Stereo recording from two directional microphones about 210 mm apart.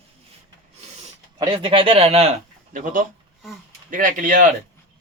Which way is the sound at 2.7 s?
40° right (ahead or behind).